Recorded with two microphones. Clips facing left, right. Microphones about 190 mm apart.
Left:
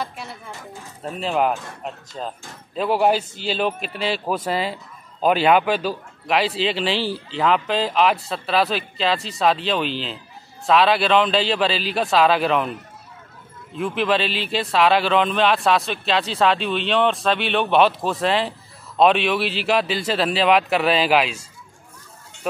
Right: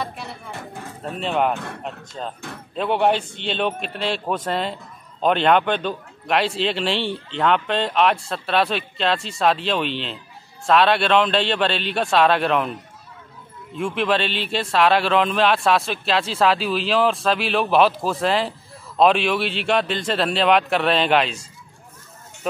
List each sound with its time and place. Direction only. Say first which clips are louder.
0.5 s a sound: right 3 dB; 60° right (ahead or behind)
1.0 s a man's voice: even; centre (ahead or behind)
13.7 s a man's voice: even; centre (ahead or behind)